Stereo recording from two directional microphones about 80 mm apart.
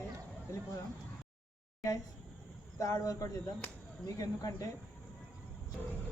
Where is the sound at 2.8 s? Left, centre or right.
Left.